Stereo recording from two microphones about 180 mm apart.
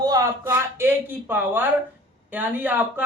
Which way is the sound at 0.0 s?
20° right (ahead or behind).